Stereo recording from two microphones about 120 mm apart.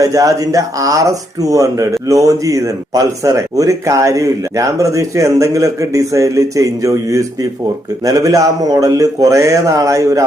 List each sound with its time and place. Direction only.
0.0 s speech: 30° right (ahead or behind)